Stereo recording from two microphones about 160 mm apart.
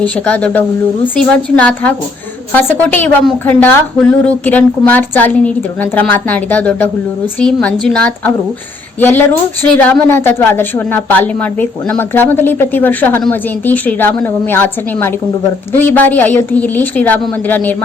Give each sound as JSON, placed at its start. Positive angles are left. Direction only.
{"t": 0.3, "sound": "a woman's voice", "side_deg": 10}